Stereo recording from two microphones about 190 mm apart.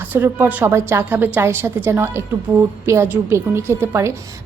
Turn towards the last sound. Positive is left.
turn(degrees=-15)  # may be behind; listen again after turning